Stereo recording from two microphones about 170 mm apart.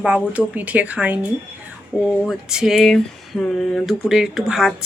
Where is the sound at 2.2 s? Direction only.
5° right (ahead or behind).